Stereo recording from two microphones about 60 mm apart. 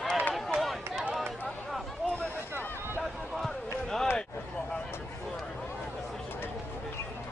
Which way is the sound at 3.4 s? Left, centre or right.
Centre.